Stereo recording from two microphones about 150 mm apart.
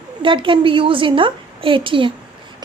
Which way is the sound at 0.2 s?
35° right (ahead or behind).